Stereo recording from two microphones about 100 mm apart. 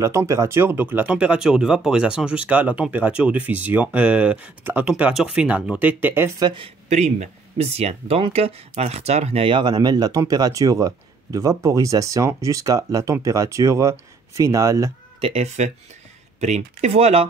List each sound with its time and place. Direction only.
0.0 s speech: 30° right (ahead or behind)
6.4 s speech: 55° right (ahead or behind)
7.5 s speech: 90° right; by 9.7 s 65° right (ahead or behind)
9.7 s speech: 45° right (ahead or behind)
15.1 s speech: 70° right (ahead or behind)
16.3 s speech: 90° right